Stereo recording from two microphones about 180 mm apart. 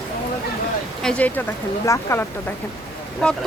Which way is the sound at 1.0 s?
5° left (ahead or behind).